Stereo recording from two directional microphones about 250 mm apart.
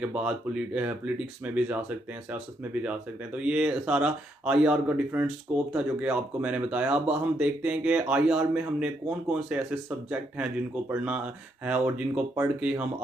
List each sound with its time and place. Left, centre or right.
0.0 s speech: centre